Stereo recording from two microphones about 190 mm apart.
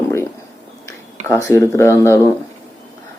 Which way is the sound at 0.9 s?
15° left (ahead or behind).